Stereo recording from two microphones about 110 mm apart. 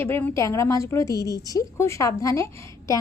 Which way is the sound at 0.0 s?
20° left (ahead or behind).